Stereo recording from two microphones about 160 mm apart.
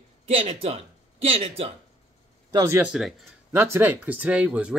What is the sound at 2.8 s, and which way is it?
Speech, 5° right (ahead or behind).